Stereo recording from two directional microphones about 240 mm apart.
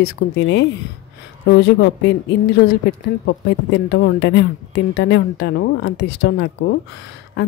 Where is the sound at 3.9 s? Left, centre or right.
Left.